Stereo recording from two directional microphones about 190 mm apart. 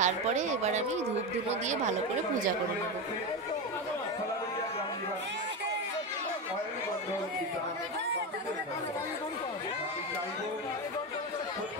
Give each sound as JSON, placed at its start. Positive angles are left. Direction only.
{"t": 0.0, "sound": "speech", "side_deg": -40}